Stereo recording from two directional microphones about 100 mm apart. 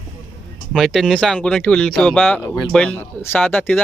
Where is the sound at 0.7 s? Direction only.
Centre (ahead or behind).